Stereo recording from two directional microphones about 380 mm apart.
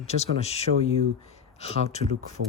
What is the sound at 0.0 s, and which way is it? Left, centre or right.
Speech, centre.